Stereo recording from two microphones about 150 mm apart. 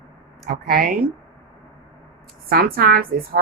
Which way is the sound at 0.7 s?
75° right (ahead or behind).